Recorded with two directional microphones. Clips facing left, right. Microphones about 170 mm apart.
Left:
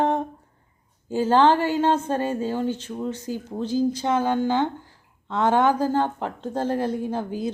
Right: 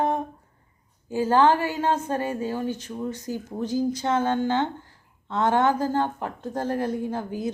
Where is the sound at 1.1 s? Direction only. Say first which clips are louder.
Left 2 dB; 25° left (ahead or behind).